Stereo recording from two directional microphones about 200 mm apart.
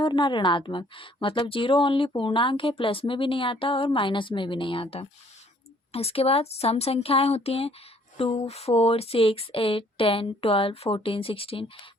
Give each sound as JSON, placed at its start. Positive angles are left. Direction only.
{"t": 0.0, "sound": "a woman's voice", "side_deg": 25}